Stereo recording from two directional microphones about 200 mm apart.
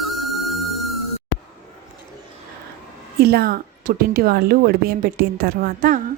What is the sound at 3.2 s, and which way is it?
A woman's voice, 50° right (ahead or behind).